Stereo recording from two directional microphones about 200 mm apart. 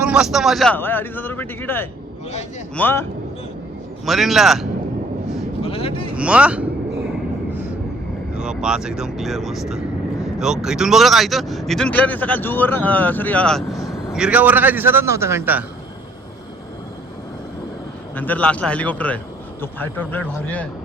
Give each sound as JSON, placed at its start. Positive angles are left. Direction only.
{"t": 0.0, "sound": "a man's voice", "side_deg": -5}
{"t": 4.0, "sound": "a man's voice", "side_deg": 0}
{"t": 5.6, "sound": "speech", "side_deg": 30}
{"t": 6.1, "sound": "a man's voice", "side_deg": -5}
{"t": 8.3, "sound": "a man's voice", "side_deg": -5}
{"t": 18.2, "sound": "a man's voice", "side_deg": 10}